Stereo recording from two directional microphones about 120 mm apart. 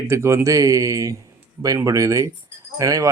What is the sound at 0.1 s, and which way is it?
Speech, 20° right (ahead or behind).